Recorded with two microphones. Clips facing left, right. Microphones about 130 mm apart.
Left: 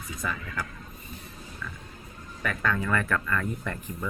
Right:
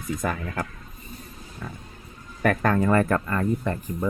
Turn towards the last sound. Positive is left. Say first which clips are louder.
# right 7 dB
turn(degrees=-35)  # may be behind; listen again after turning